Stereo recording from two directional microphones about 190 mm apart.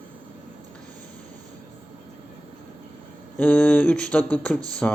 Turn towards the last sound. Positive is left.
turn(degrees=10)  # may be behind; listen again after turning